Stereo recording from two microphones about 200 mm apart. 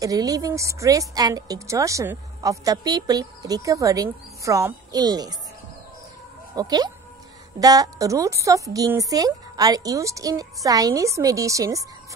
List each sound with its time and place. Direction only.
0.0 s a woman's voice: 15° right (ahead or behind)
6.5 s a woman's voice: 20° right (ahead or behind)